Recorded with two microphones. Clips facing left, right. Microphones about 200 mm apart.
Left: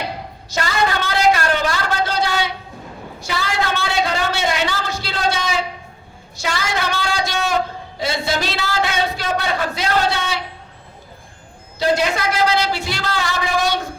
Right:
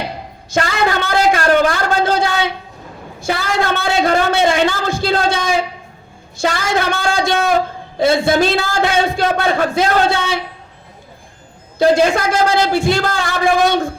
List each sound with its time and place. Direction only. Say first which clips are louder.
0.5 s a man's voice: right 4 dB; 50° right (ahead or behind)
11.8 s a man's voice: right 6 dB; 50° right (ahead or behind)